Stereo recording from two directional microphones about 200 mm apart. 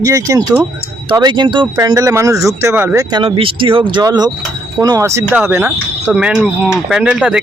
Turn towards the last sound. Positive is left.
turn(degrees=-5)  # may be behind; listen again after turning